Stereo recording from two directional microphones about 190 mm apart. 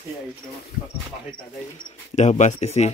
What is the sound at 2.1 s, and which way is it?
Speech, 40° left (ahead or behind).